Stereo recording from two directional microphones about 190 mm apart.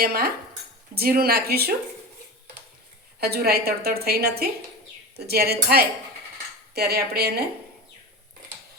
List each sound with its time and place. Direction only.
0.0 s a woman's voice: 55° right (ahead or behind)
3.2 s a woman's voice: 55° right (ahead or behind)